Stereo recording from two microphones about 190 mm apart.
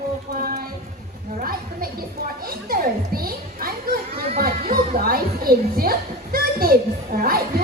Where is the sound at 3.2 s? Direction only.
50° right (ahead or behind).